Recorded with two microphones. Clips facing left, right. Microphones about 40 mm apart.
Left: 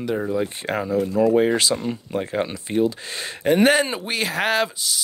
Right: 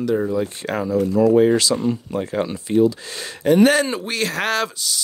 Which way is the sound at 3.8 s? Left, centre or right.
Centre.